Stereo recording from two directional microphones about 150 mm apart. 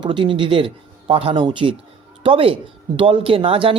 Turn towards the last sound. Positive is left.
turn(degrees=-35)  # may be behind; listen again after turning